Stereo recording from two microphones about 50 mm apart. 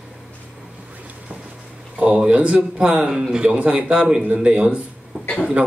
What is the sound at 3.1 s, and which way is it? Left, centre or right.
Speech, centre.